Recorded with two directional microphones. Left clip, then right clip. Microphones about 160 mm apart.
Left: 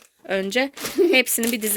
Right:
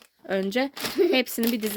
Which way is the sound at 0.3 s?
20° right (ahead or behind).